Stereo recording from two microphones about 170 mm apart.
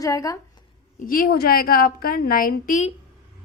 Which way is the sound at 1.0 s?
55° left (ahead or behind).